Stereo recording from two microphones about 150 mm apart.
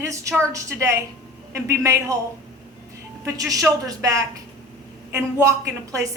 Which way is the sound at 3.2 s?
20° right (ahead or behind).